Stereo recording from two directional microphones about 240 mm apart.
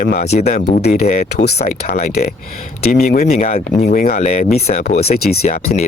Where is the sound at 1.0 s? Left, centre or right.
Left.